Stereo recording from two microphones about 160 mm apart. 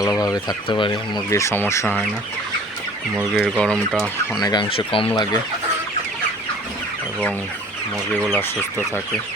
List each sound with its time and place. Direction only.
0.0 s speech: 25° left (ahead or behind)
1.3 s speech: 15° left (ahead or behind)
3.3 s speech: 5° right (ahead or behind)
3.6 s speech: 5° left (ahead or behind)
4.4 s speech: 25° left (ahead or behind)